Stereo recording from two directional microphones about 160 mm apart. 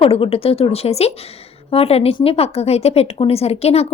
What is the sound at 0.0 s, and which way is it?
A woman's voice, 35° left (ahead or behind).